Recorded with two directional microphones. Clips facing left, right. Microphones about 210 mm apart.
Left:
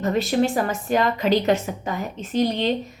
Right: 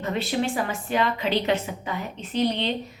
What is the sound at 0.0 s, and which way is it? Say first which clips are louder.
A woman's voice: left 5 dB; 40° left (ahead or behind).